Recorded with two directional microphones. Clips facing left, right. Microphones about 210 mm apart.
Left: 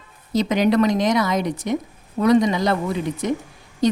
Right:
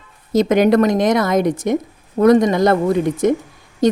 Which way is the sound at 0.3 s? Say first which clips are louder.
Right 5 dB; 50° right (ahead or behind).